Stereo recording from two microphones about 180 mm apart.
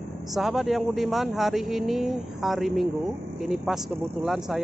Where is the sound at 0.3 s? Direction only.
Centre (ahead or behind).